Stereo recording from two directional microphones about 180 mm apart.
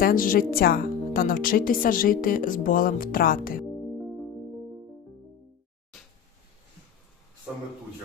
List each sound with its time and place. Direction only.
0.0 s speech: 50° left (ahead or behind)